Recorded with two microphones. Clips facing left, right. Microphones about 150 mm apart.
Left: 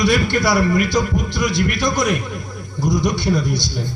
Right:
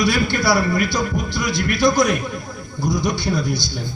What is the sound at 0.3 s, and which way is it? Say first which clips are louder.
A man's voice: left 2 dB; 20° left (ahead or behind).